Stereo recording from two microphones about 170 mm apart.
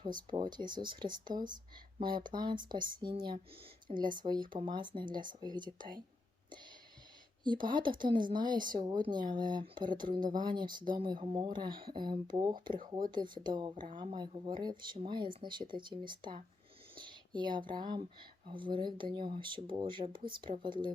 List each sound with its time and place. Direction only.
0.5 s speech: 25° right (ahead or behind)
7.4 s speech: 25° right (ahead or behind)
9.9 s speech: 55° right (ahead or behind)
10.2 s speech: 25° right (ahead or behind)